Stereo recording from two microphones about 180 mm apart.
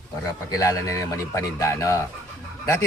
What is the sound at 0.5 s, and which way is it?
Speech, 20° left (ahead or behind).